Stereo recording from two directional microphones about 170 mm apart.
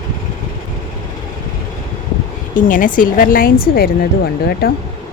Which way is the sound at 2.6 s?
50° left (ahead or behind).